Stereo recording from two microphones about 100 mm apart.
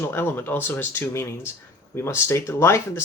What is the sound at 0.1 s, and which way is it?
Speech, 20° left (ahead or behind).